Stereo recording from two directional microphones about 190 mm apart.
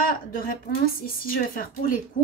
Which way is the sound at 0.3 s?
50° left (ahead or behind).